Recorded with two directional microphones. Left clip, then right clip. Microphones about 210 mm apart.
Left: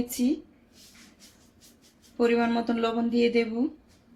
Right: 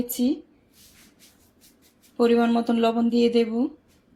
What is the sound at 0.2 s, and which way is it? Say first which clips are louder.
Speech: right 3 dB; 30° right (ahead or behind).